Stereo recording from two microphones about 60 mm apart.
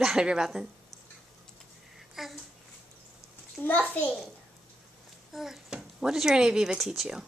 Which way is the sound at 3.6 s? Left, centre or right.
Left.